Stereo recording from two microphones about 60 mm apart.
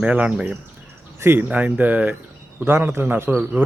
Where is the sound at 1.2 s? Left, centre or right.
Right.